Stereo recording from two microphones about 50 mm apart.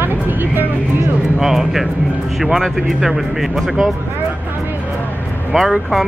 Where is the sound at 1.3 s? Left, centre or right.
Centre.